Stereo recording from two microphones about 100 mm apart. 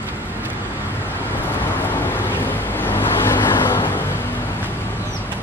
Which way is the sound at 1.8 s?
20° left (ahead or behind).